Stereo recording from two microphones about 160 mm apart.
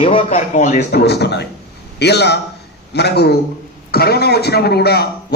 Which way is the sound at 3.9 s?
80° left.